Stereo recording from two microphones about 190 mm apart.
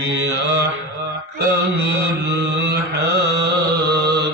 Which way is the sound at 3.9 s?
60° right (ahead or behind).